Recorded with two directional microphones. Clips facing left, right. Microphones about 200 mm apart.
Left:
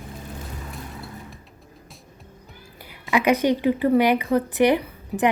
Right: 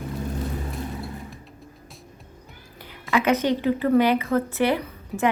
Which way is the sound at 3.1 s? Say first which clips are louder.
Left 2 dB; 15° left (ahead or behind).